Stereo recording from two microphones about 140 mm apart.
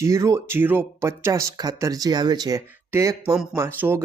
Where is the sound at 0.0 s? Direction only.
20° right (ahead or behind).